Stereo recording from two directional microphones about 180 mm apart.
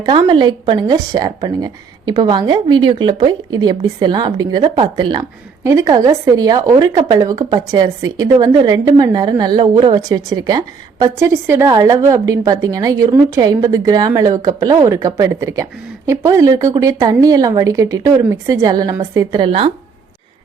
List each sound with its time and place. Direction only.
0.0 s a woman's voice: 25° right (ahead or behind)